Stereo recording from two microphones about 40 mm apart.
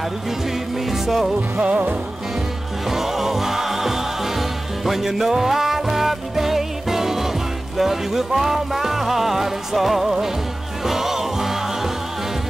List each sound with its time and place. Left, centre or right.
0.8 s music: centre
1.6 s music: right
2.9 s music: centre